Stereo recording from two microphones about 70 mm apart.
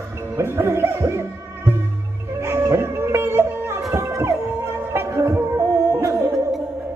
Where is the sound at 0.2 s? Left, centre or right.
Right.